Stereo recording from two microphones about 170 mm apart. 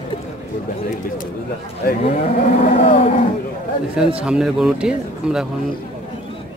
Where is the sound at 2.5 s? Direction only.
35° left (ahead or behind).